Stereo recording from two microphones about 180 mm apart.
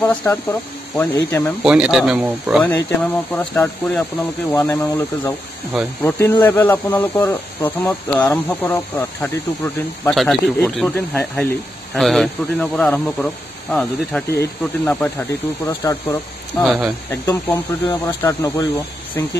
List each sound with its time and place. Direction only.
0.1 s speech: 10° left (ahead or behind)
1.6 s a man's voice: 5° right (ahead or behind)
2.6 s speech: 10° left (ahead or behind)
4.6 s a man's voice: 15° left (ahead or behind)